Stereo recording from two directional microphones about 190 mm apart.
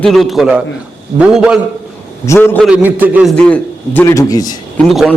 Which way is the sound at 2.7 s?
10° right (ahead or behind).